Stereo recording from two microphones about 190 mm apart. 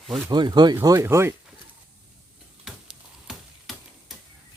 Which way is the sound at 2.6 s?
Centre (ahead or behind).